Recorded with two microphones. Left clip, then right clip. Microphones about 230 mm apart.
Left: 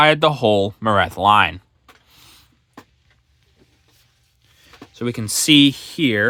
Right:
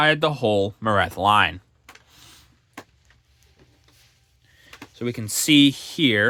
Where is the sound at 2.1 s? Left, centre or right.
Centre.